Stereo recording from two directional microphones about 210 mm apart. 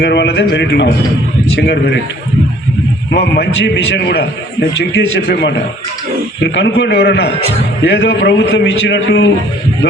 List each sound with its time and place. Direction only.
0.0 s a man's voice: 50° left (ahead or behind)
3.1 s a man's voice: 50° left (ahead or behind)